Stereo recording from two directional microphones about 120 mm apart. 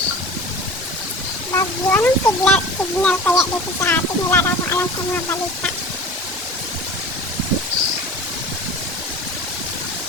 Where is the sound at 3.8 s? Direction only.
20° left (ahead or behind).